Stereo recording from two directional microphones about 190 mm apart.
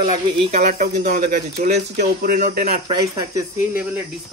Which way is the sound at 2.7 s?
20° right (ahead or behind).